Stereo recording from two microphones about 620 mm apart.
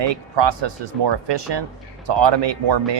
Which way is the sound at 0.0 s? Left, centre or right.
Right.